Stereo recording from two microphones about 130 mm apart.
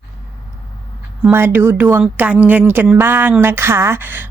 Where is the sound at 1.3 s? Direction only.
15° right (ahead or behind).